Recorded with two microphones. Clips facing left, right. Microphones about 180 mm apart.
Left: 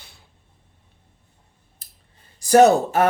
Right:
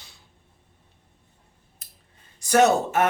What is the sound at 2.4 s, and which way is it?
Speech, 35° left (ahead or behind).